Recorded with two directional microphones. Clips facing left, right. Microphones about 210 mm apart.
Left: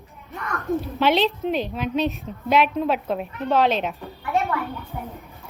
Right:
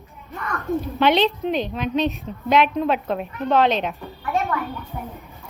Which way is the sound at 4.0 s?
15° left (ahead or behind).